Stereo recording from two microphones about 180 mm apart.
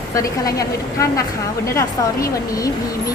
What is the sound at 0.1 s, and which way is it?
A woman's voice, 20° left (ahead or behind).